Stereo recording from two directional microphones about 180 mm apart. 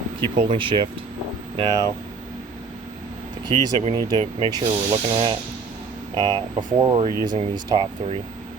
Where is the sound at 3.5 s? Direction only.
30° right (ahead or behind).